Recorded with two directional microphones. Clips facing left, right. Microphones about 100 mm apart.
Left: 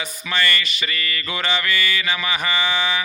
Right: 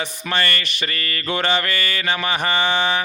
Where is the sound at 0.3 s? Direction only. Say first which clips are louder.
Left 1 dB; 45° right (ahead or behind).